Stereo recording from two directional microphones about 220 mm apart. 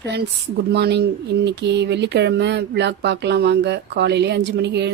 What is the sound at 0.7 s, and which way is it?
Speech, 50° right (ahead or behind).